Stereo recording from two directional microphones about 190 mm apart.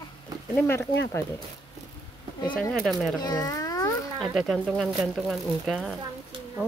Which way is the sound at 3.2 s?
20° left (ahead or behind).